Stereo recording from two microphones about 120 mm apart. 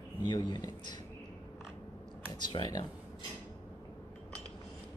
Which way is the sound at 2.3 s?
35° left (ahead or behind).